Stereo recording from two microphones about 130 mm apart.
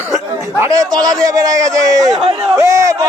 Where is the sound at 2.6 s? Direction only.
25° right (ahead or behind).